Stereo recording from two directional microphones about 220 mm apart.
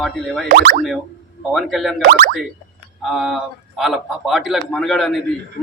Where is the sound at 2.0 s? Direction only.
40° right (ahead or behind).